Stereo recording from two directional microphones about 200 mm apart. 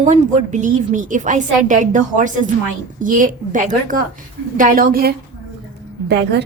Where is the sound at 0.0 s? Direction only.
40° right (ahead or behind).